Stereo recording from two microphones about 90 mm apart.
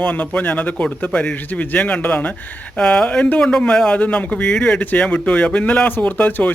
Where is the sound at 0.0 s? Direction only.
15° left (ahead or behind).